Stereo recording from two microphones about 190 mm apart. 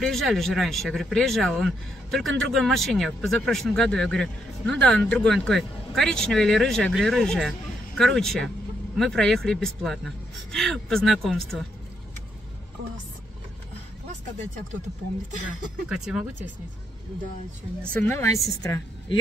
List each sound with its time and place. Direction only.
0.0 s speech: centre (ahead or behind)
15.4 s speech: 5° right (ahead or behind)
17.9 s a woman's voice: 10° left (ahead or behind)